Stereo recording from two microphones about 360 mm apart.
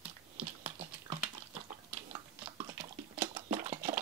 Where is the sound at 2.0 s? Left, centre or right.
Centre.